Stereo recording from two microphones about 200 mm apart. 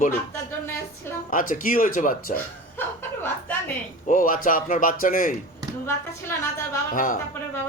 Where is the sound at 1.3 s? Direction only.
45° left (ahead or behind).